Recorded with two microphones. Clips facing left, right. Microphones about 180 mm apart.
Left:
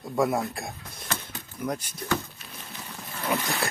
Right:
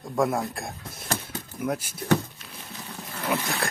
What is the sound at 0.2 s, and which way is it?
Speech, centre (ahead or behind).